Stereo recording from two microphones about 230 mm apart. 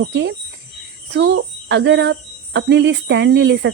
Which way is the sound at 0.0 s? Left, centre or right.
Right.